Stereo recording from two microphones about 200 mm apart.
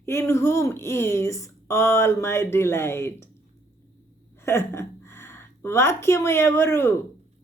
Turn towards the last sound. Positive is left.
turn(degrees=10)  # may be behind; listen again after turning